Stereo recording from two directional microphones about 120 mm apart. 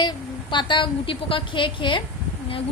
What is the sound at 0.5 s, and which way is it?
A woman's voice, 40° left (ahead or behind).